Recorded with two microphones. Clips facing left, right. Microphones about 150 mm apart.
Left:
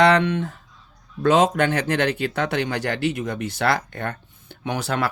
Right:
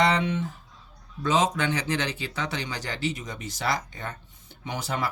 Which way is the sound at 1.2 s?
55° left (ahead or behind).